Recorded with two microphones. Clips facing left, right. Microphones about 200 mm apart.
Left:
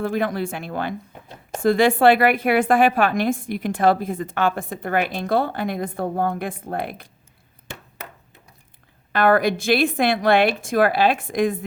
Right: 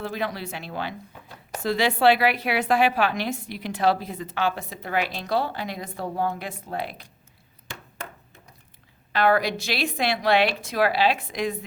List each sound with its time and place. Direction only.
0.0 s a woman's voice: 50° left (ahead or behind)
1.3 s a sound: 25° left (ahead or behind)
1.6 s a woman's voice: 50° left (ahead or behind)
9.1 s a woman's voice: 50° left (ahead or behind)